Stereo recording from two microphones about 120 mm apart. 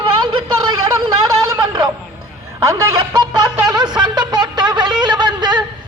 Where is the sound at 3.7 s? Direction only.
35° right (ahead or behind).